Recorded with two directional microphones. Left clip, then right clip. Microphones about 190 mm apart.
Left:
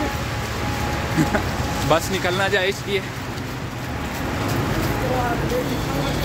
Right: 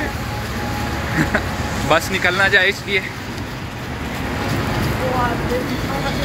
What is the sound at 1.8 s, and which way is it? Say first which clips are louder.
Speech: right 4 dB; 10° left (ahead or behind).